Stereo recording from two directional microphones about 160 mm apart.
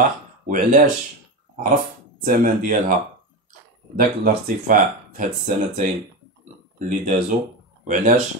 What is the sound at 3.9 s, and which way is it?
Speech, 60° right (ahead or behind).